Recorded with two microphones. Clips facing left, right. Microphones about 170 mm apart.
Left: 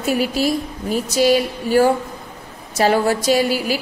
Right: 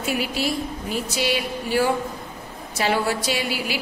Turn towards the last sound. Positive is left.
turn(degrees=40)  # may be behind; listen again after turning